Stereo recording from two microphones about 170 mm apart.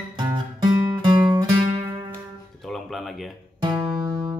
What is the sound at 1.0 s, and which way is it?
Music, 25° right (ahead or behind).